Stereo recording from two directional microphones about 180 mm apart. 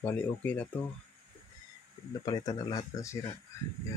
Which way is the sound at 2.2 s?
20° left (ahead or behind).